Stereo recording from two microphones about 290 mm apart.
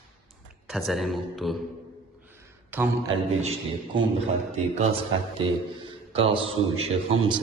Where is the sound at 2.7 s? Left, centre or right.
Centre.